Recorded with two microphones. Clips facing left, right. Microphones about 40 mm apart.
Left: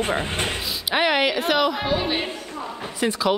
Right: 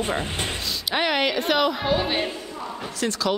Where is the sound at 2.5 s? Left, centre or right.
Centre.